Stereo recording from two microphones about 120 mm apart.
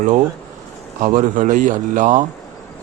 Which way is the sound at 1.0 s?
90° right.